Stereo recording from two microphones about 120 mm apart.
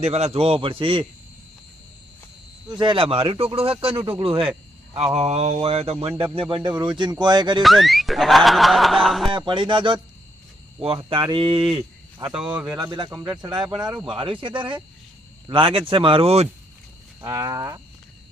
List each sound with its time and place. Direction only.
0.0 s speech: 60° right (ahead or behind)
2.6 s speech: 40° right (ahead or behind)
4.9 s mantra: 60° right (ahead or behind)
6.3 s speech: 45° right (ahead or behind)
7.6 s snicker: centre (ahead or behind)
9.3 s speech: 45° right (ahead or behind)
12.3 s speech: 10° right (ahead or behind)
12.6 s speech: 30° right (ahead or behind)
14.1 s speech: 45° right (ahead or behind)
17.2 s speech: 30° right (ahead or behind)